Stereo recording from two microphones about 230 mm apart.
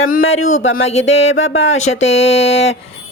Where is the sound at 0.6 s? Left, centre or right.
Left.